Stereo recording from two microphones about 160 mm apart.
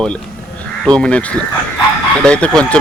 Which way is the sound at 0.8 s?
5° left (ahead or behind).